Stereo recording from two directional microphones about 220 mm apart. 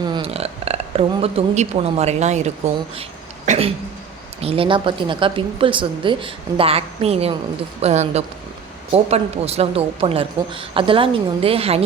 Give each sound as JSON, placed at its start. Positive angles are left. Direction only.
{"t": 0.0, "sound": "speech", "side_deg": -25}